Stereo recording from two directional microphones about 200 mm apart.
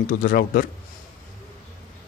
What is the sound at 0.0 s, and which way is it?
Speech, 45° left (ahead or behind).